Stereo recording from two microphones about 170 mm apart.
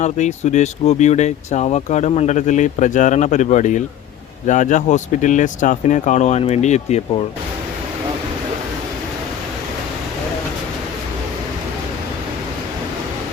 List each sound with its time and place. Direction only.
0.0 s speech: 45° left (ahead or behind)